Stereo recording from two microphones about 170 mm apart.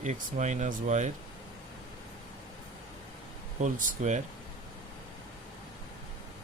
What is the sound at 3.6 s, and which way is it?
Speech, 45° right (ahead or behind).